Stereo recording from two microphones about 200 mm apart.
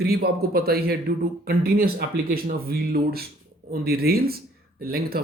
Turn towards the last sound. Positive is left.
turn(degrees=-50)  # may be behind; listen again after turning